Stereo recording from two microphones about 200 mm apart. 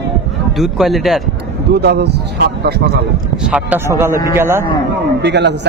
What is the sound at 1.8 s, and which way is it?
A man's voice, 55° right (ahead or behind).